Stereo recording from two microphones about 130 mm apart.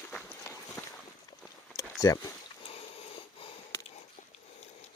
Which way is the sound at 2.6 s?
50° left (ahead or behind).